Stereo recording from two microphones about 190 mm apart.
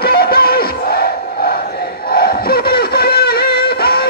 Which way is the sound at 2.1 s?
50° left (ahead or behind).